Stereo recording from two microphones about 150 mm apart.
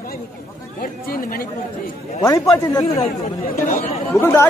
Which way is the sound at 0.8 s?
75° left (ahead or behind).